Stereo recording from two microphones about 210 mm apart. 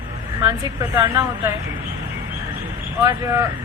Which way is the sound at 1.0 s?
15° right (ahead or behind).